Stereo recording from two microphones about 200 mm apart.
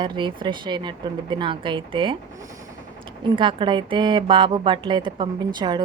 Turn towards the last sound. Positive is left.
turn(degrees=-25)  # may be behind; listen again after turning